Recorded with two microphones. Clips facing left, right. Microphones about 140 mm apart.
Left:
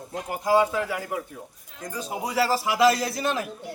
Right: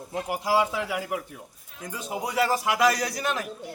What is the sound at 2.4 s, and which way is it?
Speech, 30° left (ahead or behind).